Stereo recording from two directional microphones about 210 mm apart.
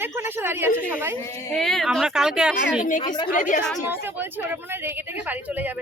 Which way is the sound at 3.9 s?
10° right (ahead or behind).